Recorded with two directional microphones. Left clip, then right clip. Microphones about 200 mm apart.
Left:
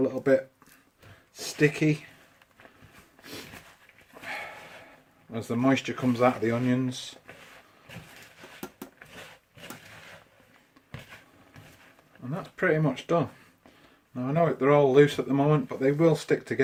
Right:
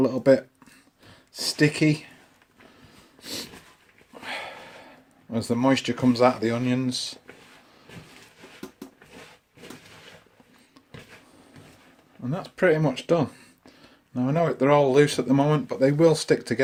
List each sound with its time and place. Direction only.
0.0 s speech: 45° right (ahead or behind)
1.4 s speech: 40° right (ahead or behind)
5.3 s speech: 40° right (ahead or behind)
12.3 s speech: 40° right (ahead or behind)